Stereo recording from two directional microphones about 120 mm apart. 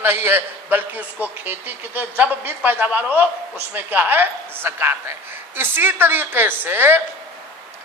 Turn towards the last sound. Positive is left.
turn(degrees=-15)  # may be behind; listen again after turning